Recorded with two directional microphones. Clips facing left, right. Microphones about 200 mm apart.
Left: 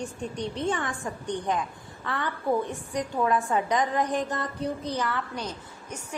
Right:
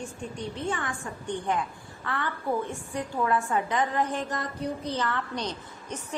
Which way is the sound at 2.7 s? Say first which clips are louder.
Left 2 dB; 15° left (ahead or behind).